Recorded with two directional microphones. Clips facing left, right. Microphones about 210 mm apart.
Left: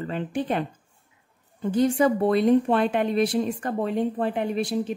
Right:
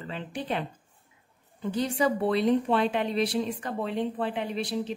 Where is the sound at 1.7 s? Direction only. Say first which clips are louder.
Left 6 dB; 50° left (ahead or behind).